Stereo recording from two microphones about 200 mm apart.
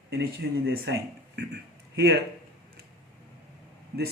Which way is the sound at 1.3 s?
55° right (ahead or behind).